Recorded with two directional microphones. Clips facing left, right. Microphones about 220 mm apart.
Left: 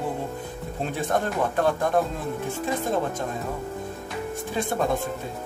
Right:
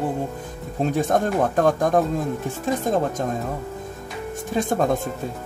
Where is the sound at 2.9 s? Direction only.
45° right (ahead or behind).